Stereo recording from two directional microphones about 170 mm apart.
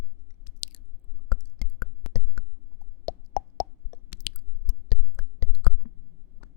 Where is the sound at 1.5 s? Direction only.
60° left (ahead or behind).